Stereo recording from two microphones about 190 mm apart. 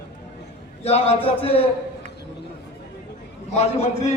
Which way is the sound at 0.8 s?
30° left (ahead or behind).